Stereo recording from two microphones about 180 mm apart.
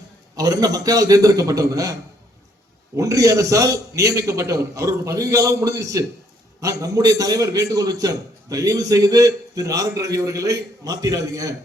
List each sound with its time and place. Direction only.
0.3 s a man's voice: 20° right (ahead or behind)